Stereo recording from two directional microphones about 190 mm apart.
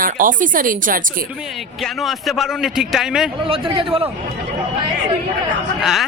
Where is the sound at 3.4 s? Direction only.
30° right (ahead or behind).